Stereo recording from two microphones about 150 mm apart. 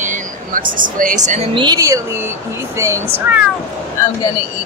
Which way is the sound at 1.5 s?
30° right (ahead or behind).